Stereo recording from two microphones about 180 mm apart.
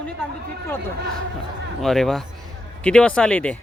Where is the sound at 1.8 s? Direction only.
Centre (ahead or behind).